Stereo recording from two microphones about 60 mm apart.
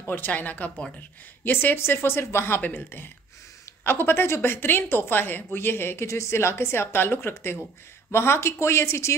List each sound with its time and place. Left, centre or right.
0.0 s speech: left
6.0 s a woman's voice: left